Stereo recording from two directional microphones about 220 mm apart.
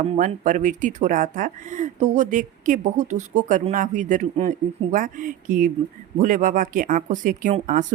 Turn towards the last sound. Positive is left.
turn(degrees=-35)  # may be behind; listen again after turning